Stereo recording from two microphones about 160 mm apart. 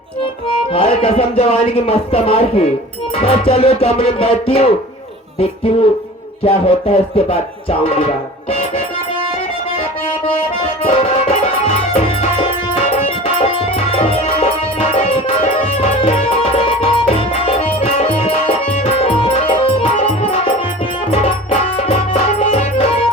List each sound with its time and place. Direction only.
0.7 s music: 35° left (ahead or behind)
6.4 s music: 35° left (ahead or behind)
10.2 s music: 35° left (ahead or behind)